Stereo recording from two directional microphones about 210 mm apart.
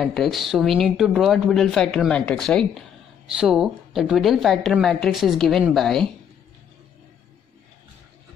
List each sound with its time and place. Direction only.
0.0 s speech: centre (ahead or behind)